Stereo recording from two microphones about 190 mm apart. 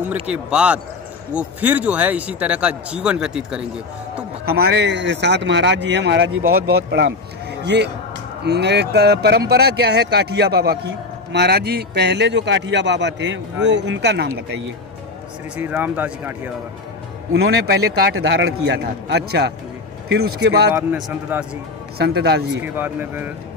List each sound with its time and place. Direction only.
0.1 s speech: 5° right (ahead or behind)
4.5 s speech: 55° right (ahead or behind); by 6.4 s 80° right
6.5 s a man's voice: 60° right (ahead or behind)
15.5 s speech: 10° right (ahead or behind)
17.3 s a man's voice: 60° right (ahead or behind)
20.7 s speech: 10° right (ahead or behind)
21.9 s a man's voice: 60° right (ahead or behind)
22.6 s speech: 10° right (ahead or behind)